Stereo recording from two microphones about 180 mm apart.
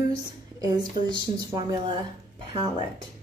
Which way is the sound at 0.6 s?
25° right (ahead or behind).